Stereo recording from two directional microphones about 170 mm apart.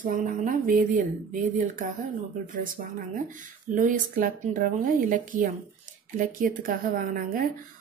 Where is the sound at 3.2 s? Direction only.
50° right (ahead or behind).